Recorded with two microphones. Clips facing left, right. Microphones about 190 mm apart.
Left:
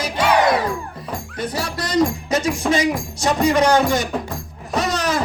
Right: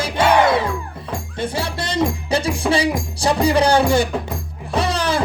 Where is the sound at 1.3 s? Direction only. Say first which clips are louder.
Right 2 dB; 25° right (ahead or behind).